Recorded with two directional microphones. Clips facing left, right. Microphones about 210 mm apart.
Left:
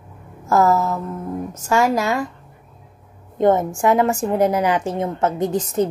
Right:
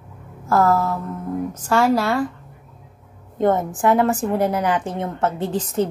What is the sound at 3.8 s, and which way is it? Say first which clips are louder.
A woman's voice: right 3 dB; 10° left (ahead or behind).